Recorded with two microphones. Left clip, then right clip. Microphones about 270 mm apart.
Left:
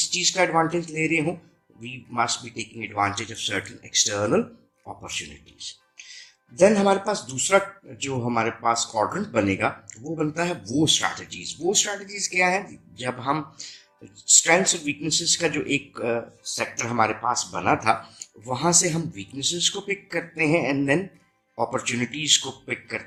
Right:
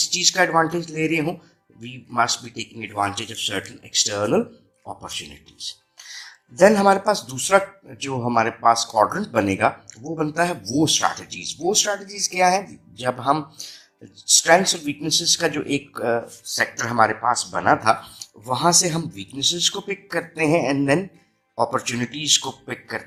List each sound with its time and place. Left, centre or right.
0.0 s speech: right
6.6 s speech: right
14.4 s speech: centre